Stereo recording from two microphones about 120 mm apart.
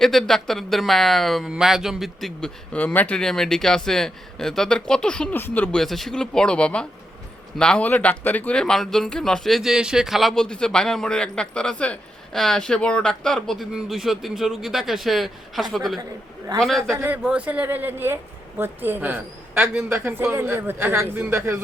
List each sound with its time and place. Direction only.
0.0 s speech: centre (ahead or behind)
2.7 s speech: 15° left (ahead or behind)
5.8 s speech: centre (ahead or behind)
16.9 s speech: 15° right (ahead or behind)